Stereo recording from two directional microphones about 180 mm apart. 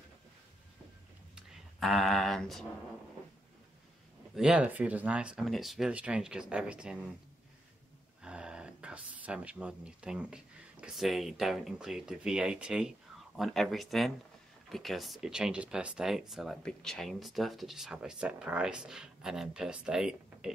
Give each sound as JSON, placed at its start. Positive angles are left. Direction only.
{"t": 1.3, "sound": "a sound", "side_deg": 0}
{"t": 4.4, "sound": "speech", "side_deg": -5}
{"t": 8.2, "sound": "speech", "side_deg": -5}